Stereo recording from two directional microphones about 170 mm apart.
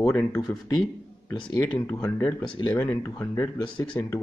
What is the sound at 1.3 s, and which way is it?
Speech, 25° left (ahead or behind).